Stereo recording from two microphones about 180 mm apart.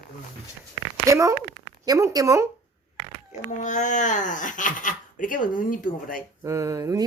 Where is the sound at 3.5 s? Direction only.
45° left (ahead or behind).